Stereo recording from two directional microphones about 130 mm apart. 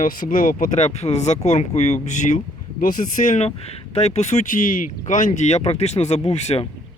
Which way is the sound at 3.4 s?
55° left (ahead or behind).